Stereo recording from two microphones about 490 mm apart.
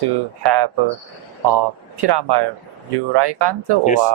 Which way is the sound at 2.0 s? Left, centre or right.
Right.